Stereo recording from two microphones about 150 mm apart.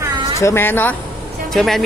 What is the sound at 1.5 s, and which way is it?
Speech, centre (ahead or behind).